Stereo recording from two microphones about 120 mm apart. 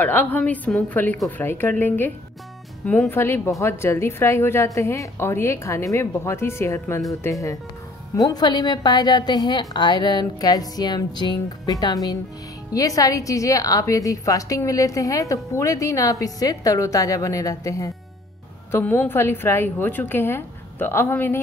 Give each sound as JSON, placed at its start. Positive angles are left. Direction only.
{"t": 0.0, "sound": "a woman's voice", "side_deg": 15}
{"t": 8.3, "sound": "a woman's voice", "side_deg": 35}
{"t": 18.7, "sound": "a woman's voice", "side_deg": 15}